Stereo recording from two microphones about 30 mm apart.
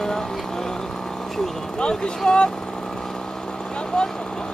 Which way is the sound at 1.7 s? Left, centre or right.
Left.